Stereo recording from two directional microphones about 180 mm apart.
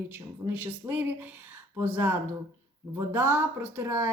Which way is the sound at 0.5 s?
10° right (ahead or behind).